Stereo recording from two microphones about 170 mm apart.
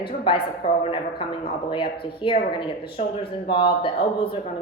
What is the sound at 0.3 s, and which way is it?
Speech, 30° left (ahead or behind).